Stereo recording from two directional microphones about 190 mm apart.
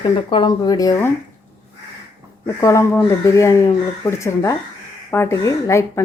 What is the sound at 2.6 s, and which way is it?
Speech, 15° left (ahead or behind).